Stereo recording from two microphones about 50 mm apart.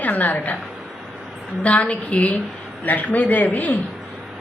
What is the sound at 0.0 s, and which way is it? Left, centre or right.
Speech, left.